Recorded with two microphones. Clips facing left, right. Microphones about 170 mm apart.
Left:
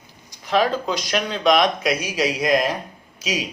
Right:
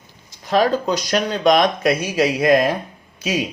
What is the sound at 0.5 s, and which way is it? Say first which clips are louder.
Speech: right 3 dB; 45° right (ahead or behind).